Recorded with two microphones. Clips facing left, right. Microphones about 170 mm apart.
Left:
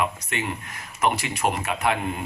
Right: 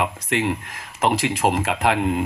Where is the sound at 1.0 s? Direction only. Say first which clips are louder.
Right 4 dB; 90° right.